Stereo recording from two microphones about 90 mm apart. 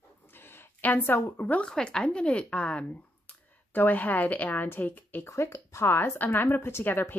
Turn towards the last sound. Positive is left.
turn(degrees=20)  # may be behind; listen again after turning